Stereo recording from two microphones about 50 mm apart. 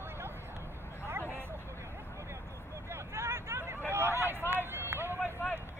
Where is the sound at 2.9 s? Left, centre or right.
Right.